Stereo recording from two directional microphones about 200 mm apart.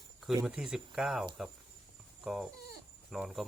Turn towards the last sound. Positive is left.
turn(degrees=0)  # may be behind; listen again after turning